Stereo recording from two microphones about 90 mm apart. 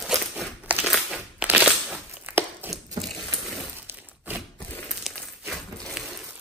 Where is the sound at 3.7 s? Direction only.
20° right (ahead or behind).